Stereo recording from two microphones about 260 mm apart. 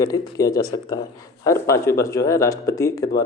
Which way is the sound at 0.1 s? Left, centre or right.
Centre.